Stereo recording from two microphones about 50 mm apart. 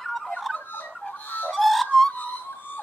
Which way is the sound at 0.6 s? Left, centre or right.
Left.